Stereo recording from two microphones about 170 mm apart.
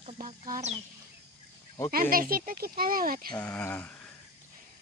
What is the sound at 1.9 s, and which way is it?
Speech, 60° right (ahead or behind).